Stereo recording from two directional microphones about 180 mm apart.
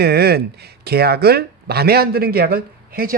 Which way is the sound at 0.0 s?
60° right (ahead or behind).